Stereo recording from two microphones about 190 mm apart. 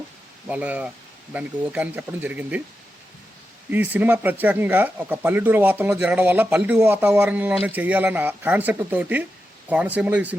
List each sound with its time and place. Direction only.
0.4 s speech: 10° right (ahead or behind)
3.7 s speech: 10° right (ahead or behind)